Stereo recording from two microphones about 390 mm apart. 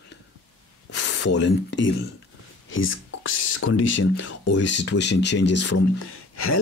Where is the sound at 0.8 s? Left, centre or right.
Left.